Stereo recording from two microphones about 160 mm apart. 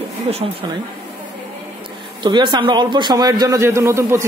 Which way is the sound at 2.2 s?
30° right (ahead or behind).